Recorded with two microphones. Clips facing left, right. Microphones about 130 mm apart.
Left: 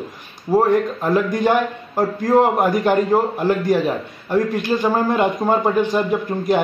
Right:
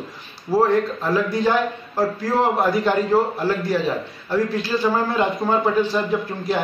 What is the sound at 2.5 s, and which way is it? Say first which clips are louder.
A man's voice: left 2 dB; 15° left (ahead or behind).